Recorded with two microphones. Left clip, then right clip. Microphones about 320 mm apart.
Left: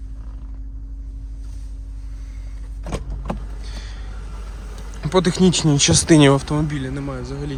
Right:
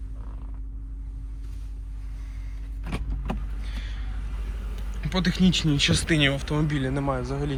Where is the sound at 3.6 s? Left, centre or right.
Centre.